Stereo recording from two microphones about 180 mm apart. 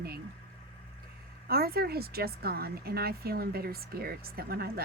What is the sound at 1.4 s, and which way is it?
A woman's voice, 55° right (ahead or behind).